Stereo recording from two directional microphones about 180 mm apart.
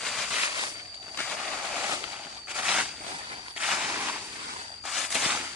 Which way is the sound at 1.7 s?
15° right (ahead or behind).